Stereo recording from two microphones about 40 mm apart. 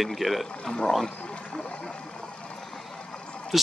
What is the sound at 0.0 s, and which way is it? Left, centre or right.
Speech, centre.